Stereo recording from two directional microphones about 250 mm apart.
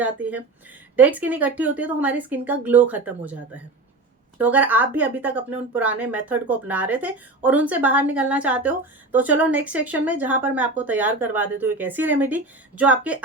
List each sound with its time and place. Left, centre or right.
0.0 s a woman's voice: centre